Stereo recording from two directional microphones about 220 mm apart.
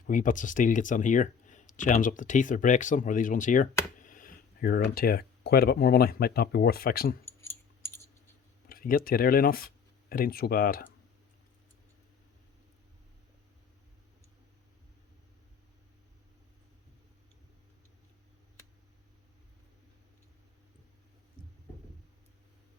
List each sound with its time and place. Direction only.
0.1 s speech: 35° left (ahead or behind)
7.3 s keys jangling: 10° left (ahead or behind)
8.7 s speech: 40° left (ahead or behind)